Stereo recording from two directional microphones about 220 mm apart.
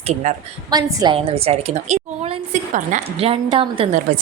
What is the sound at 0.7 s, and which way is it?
A woman's voice, 15° right (ahead or behind).